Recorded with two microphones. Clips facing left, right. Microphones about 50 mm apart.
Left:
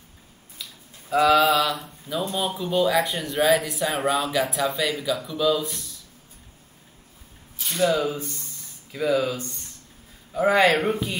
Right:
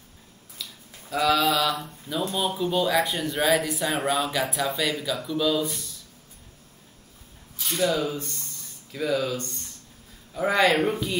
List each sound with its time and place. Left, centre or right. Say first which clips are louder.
1.1 s speech: left 4 dB; centre
1.6 s speech: left 1 dB; centre
7.8 s speech: left 3 dB; centre
8.2 s speech: left 2 dB; centre